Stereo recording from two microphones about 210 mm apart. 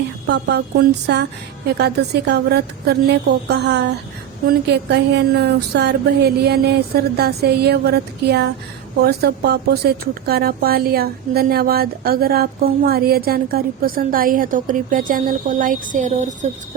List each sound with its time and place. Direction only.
0.3 s speech: 55° right (ahead or behind); by 16.5 s 35° right (ahead or behind)